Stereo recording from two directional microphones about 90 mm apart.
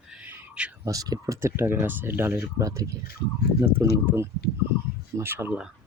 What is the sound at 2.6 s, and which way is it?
Speech, 40° right (ahead or behind).